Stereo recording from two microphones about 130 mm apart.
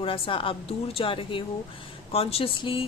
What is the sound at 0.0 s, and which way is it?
A woman's voice, 45° left (ahead or behind).